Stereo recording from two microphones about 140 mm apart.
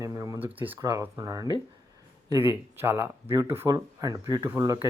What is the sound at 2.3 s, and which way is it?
Speech, 15° right (ahead or behind).